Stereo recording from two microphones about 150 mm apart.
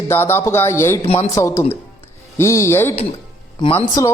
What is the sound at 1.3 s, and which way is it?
A man's voice, 20° left (ahead or behind).